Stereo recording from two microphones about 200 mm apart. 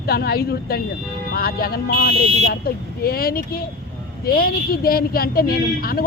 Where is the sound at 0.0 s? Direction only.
50° left (ahead or behind).